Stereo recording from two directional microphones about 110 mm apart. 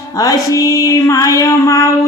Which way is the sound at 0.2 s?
30° left (ahead or behind).